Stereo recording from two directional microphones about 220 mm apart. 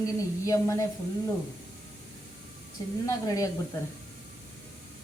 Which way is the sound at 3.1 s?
15° left (ahead or behind).